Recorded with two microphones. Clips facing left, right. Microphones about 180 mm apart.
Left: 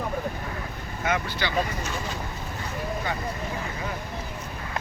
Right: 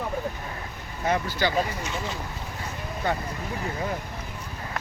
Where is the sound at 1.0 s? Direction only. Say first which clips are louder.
Right 3 dB; 40° right (ahead or behind).